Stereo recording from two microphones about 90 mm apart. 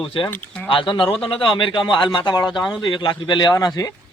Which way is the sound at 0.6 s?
70° left (ahead or behind).